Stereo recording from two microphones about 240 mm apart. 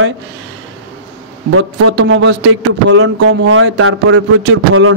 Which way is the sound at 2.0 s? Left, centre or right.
Right.